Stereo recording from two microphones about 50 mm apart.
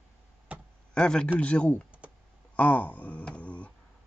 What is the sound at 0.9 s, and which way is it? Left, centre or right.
Speech, centre.